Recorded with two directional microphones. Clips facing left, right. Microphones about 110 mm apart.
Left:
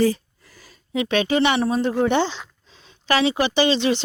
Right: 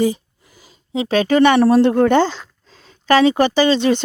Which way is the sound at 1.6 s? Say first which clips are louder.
Right 8 dB; 70° right (ahead or behind).